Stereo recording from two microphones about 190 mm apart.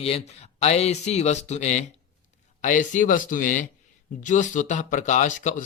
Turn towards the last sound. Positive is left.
turn(degrees=40)  # may be behind; listen again after turning